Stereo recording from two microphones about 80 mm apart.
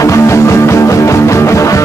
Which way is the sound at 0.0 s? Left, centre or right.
Left.